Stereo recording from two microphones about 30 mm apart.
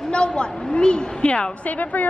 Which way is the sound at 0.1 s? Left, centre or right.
Left.